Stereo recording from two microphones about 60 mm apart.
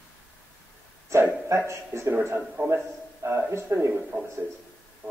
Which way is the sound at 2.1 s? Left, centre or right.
Right.